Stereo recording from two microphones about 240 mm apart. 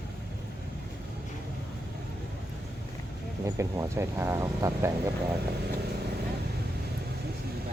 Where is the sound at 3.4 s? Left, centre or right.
Centre.